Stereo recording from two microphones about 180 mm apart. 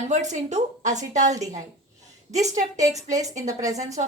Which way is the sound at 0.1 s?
40° right (ahead or behind).